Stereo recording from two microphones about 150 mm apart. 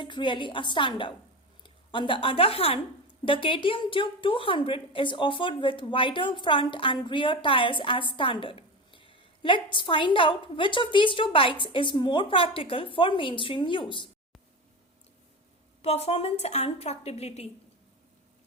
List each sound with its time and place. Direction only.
0.0 s a woman's voice: 30° left (ahead or behind)
15.8 s a woman's voice: 45° left (ahead or behind)